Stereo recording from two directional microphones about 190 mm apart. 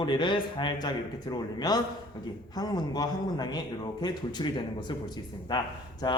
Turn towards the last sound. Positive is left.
turn(degrees=20)  # may be behind; listen again after turning